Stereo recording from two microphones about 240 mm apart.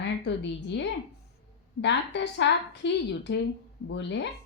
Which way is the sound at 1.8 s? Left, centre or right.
Left.